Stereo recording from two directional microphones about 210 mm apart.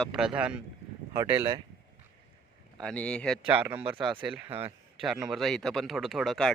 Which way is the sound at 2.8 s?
5° left (ahead or behind).